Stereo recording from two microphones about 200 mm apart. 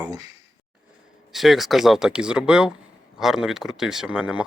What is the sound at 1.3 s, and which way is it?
Speech, centre (ahead or behind).